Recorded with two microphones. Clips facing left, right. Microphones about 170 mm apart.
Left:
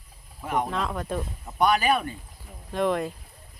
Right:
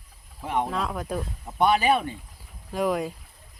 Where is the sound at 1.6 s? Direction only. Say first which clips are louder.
Right 1 dB; 25° right (ahead or behind).